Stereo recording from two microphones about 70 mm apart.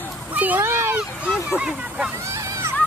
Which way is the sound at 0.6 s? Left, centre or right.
Right.